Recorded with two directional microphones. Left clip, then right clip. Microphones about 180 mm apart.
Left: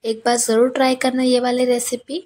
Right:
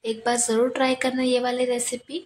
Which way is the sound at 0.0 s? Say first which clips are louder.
Left 6 dB; 25° left (ahead or behind).